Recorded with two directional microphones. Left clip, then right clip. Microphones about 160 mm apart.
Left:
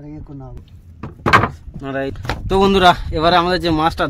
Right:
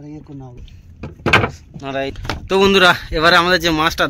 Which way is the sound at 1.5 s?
60° left (ahead or behind).